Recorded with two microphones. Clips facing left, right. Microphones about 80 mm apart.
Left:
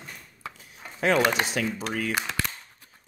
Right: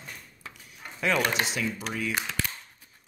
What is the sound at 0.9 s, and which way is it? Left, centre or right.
Speech, left.